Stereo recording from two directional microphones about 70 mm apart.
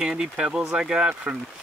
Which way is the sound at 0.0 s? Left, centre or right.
Centre.